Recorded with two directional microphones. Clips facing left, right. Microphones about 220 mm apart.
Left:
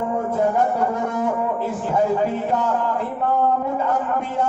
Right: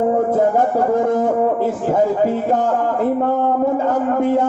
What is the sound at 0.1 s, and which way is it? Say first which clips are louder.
A man's voice: right 5 dB; 50° right (ahead or behind).